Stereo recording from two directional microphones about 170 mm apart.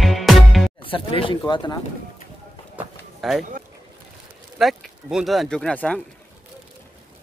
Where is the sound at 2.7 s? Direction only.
Centre (ahead or behind).